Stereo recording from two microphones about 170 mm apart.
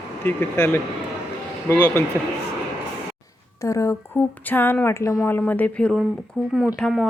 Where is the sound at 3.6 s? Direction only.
15° left (ahead or behind).